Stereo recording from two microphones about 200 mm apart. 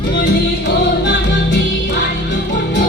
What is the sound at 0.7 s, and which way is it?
Music, 60° left (ahead or behind).